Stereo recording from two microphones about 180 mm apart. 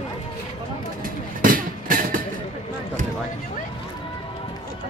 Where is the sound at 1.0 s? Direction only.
50° right (ahead or behind).